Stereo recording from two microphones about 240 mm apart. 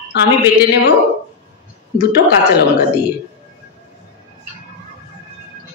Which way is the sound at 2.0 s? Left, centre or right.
Left.